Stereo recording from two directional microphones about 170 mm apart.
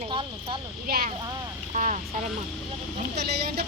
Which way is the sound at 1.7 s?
45° right (ahead or behind).